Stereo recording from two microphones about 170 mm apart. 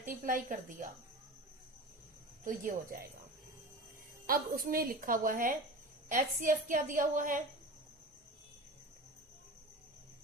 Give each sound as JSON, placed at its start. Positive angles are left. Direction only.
{"t": 0.0, "sound": "a woman's voice", "side_deg": -50}
{"t": 2.4, "sound": "a woman's voice", "side_deg": -55}
{"t": 4.3, "sound": "a woman's voice", "side_deg": -55}